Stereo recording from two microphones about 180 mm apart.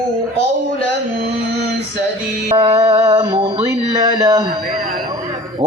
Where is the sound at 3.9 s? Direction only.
20° right (ahead or behind).